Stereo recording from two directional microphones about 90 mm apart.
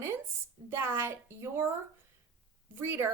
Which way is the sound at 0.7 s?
25° right (ahead or behind).